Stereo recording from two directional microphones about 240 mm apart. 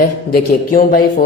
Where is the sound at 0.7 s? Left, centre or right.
Left.